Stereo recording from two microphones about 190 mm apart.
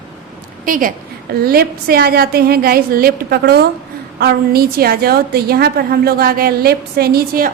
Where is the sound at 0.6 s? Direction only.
45° right (ahead or behind).